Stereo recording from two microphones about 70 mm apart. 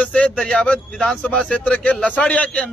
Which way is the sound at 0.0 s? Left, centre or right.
Centre.